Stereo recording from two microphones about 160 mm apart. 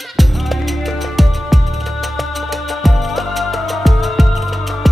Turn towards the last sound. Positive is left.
turn(degrees=0)  # may be behind; listen again after turning